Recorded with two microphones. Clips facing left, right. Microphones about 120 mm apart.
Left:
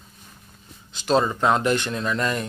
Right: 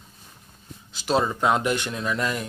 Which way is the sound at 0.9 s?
10° right (ahead or behind).